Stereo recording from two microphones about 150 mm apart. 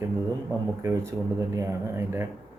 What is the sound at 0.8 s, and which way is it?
Speech, 25° right (ahead or behind).